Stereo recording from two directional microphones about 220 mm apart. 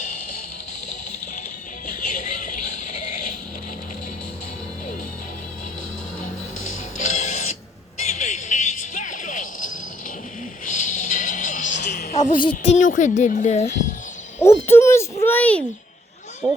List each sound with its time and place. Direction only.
1.9 s music: 35° left (ahead or behind)
6.7 s music: 35° left (ahead or behind)
10.7 s music: 35° left (ahead or behind)
12.4 s speech: 30° left (ahead or behind)
14.4 s speech: 10° left (ahead or behind)